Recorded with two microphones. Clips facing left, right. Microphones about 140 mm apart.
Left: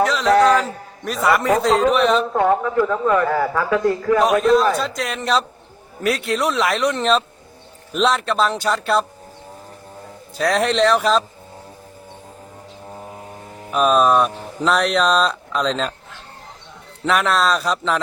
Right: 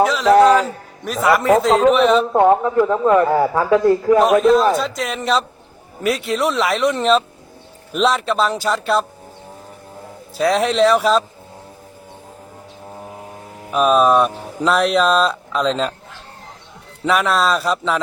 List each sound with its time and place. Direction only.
0.0 s speech: centre (ahead or behind)
2.5 s a man's voice: 20° right (ahead or behind)
4.2 s speech: centre (ahead or behind)
10.3 s speech: centre (ahead or behind)
13.6 s speech: centre (ahead or behind)
17.1 s speech: centre (ahead or behind)